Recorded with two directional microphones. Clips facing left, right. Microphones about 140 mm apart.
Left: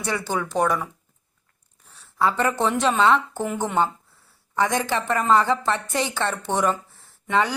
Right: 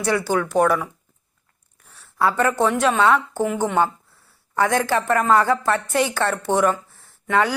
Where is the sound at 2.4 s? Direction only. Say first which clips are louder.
Right 4 dB; centre (ahead or behind).